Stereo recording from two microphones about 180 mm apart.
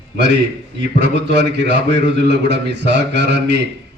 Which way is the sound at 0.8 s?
75° right (ahead or behind).